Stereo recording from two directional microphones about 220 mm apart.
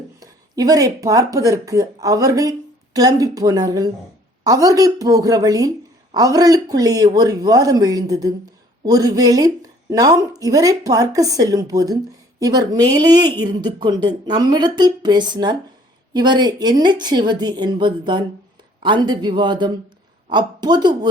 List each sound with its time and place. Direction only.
0.2 s a woman's voice: 15° right (ahead or behind)